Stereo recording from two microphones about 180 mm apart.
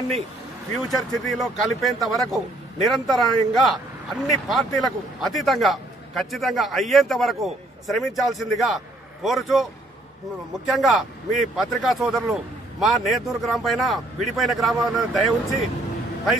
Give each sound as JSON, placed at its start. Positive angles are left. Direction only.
{"t": 0.7, "sound": "a man's voice", "side_deg": 0}
{"t": 10.7, "sound": "a man's voice", "side_deg": 0}